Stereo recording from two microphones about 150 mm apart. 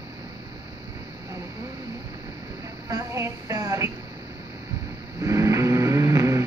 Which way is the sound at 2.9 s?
20° right (ahead or behind).